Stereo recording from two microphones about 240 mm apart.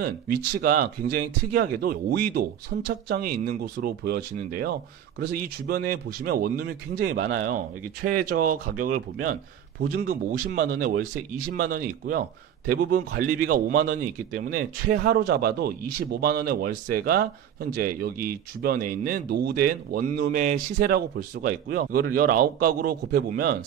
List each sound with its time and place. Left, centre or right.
0.6 s speech: right
18.3 s speech: right